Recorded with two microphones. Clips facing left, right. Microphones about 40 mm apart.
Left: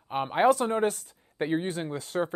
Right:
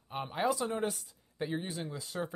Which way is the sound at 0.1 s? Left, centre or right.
Left.